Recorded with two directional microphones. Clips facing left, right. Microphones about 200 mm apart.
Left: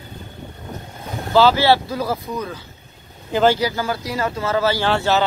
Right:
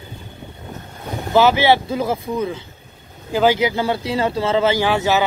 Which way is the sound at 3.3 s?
5° right (ahead or behind).